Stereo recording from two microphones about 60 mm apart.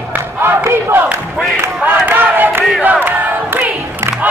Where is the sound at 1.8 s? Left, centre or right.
Right.